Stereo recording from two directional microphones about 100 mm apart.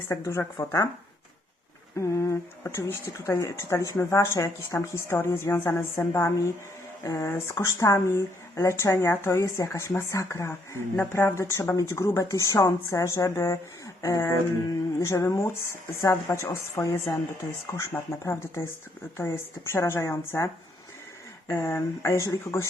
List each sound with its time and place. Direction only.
0.6 s speech: 25° left (ahead or behind)
2.0 s speech: 30° left (ahead or behind)